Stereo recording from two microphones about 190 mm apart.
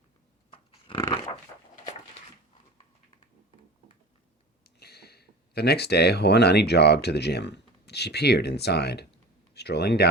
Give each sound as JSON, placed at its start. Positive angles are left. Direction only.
{"t": 0.5, "sound": "dog", "side_deg": 25}
{"t": 4.6, "sound": "speech", "side_deg": 55}